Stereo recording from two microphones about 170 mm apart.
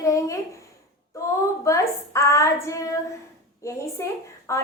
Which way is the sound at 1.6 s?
15° left (ahead or behind).